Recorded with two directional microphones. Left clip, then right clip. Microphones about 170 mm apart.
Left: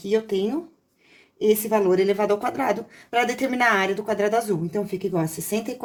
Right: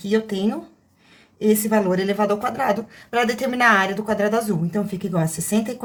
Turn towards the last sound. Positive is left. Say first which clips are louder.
# right 3 dB
turn(degrees=15)  # may be behind; listen again after turning